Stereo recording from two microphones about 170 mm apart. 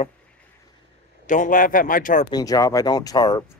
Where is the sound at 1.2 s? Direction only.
50° left (ahead or behind).